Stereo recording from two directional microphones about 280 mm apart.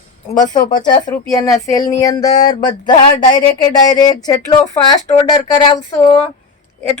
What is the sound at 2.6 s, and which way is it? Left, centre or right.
Speech, left.